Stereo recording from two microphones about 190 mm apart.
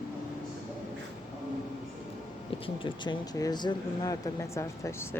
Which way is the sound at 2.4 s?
30° left (ahead or behind).